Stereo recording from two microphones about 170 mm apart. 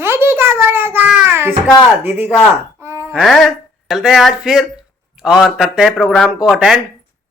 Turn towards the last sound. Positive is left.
turn(degrees=-5)  # may be behind; listen again after turning